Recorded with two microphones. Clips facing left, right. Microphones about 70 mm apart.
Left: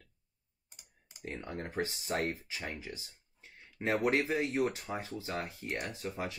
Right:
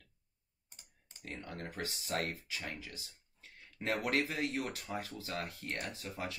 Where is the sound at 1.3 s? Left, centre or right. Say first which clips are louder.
Left 5 dB; left.